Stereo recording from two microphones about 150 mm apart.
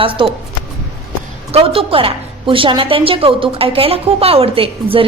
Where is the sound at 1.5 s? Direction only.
40° right (ahead or behind).